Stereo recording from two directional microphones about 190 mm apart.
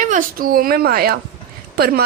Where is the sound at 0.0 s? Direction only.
45° right (ahead or behind).